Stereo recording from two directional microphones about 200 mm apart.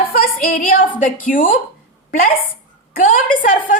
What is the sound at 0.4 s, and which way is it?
A woman's voice, 45° left (ahead or behind).